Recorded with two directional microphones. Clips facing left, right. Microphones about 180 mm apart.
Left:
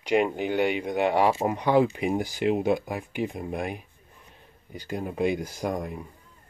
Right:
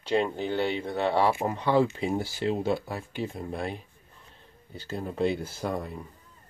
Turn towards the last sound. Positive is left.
turn(degrees=15)  # may be behind; listen again after turning